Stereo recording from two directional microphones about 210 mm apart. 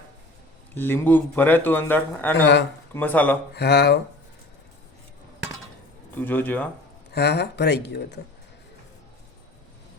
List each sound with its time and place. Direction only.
0.7 s a man's voice: 10° left (ahead or behind)
3.5 s speech: 50° left (ahead or behind)
6.1 s a man's voice: 10° left (ahead or behind)
7.1 s speech: 50° left (ahead or behind)